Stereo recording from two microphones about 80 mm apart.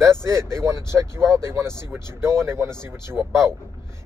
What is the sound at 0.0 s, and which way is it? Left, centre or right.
Speech, right.